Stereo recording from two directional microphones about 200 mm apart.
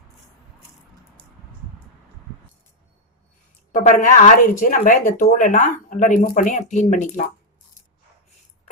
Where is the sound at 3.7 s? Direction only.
40° left (ahead or behind).